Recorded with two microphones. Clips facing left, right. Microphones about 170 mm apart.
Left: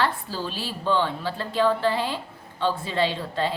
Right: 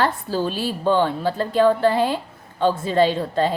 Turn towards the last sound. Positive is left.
turn(degrees=-45)  # may be behind; listen again after turning